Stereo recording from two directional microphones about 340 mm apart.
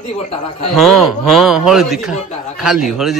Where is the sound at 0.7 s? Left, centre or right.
Centre.